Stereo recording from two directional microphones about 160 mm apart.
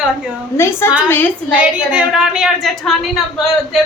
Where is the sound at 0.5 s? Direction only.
15° left (ahead or behind).